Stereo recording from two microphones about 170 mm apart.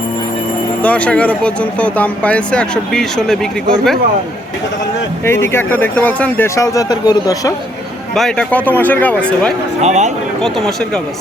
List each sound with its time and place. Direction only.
0.8 s speech: 10° left (ahead or behind)
5.2 s speech: 15° left (ahead or behind)
8.1 s speech: 5° left (ahead or behind)
9.8 s speech: 40° right (ahead or behind)